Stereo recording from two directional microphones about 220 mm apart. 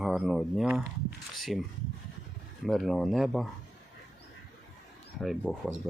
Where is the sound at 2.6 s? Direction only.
Centre (ahead or behind).